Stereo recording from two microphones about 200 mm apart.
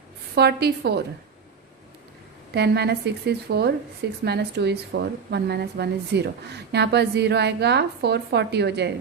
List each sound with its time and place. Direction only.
0.3 s a woman's voice: 55° right (ahead or behind)
2.5 s a woman's voice: 55° right (ahead or behind)